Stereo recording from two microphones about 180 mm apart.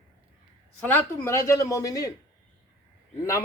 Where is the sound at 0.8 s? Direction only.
10° left (ahead or behind).